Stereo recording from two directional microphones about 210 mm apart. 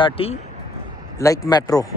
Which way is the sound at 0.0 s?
25° left (ahead or behind).